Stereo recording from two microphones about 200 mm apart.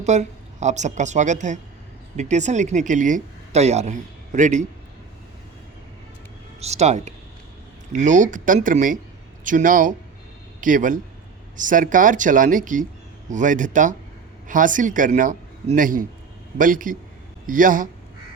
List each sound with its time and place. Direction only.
0.0 s speech: 35° right (ahead or behind)
6.6 s speech: 35° right (ahead or behind)